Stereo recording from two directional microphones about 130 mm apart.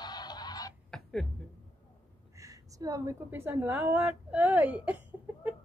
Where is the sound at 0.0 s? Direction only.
30° left (ahead or behind).